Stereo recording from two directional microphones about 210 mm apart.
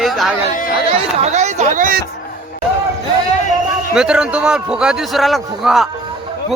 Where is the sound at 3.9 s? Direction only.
5° right (ahead or behind).